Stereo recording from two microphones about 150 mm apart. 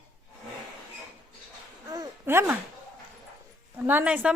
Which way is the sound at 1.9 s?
20° right (ahead or behind).